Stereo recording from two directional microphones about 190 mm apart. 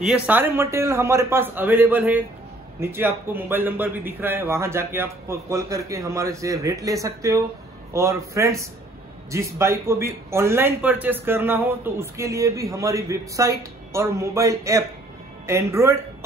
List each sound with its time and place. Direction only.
0.0 s a man's voice: 5° right (ahead or behind)